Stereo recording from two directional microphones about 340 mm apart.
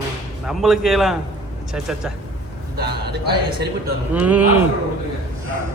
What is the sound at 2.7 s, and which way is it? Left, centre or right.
Speech, right.